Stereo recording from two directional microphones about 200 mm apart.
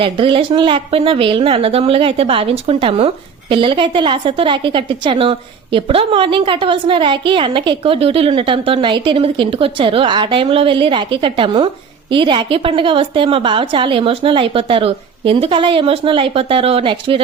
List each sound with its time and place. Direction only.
0.0 s a woman's voice: 25° right (ahead or behind)